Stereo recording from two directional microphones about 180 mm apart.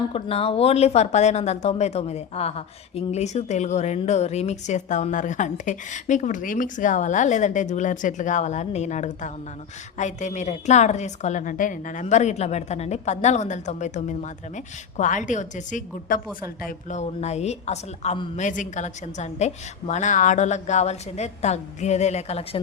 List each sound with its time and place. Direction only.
0.1 s a woman's voice: 30° left (ahead or behind)